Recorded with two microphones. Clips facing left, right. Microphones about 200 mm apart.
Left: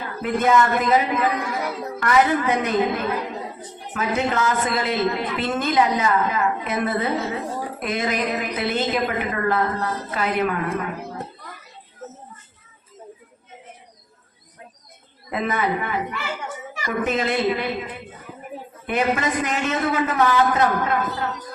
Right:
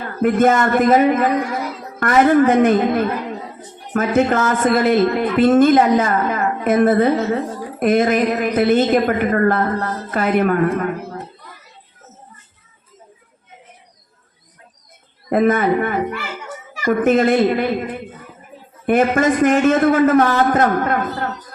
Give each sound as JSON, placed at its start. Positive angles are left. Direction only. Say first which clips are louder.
{"t": 0.2, "sound": "a woman's voice", "louder": "right 5 dB", "side_deg": -50}
{"t": 15.3, "sound": "a woman's voice", "louder": "right 9 dB", "side_deg": -50}